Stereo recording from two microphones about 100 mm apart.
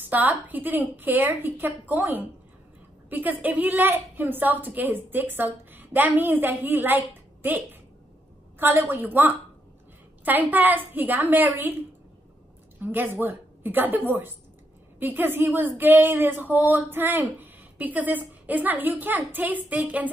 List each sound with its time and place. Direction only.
0.0 s a woman's voice: 15° right (ahead or behind)
8.5 s a woman's voice: 20° right (ahead or behind)
12.8 s a woman's voice: 20° right (ahead or behind)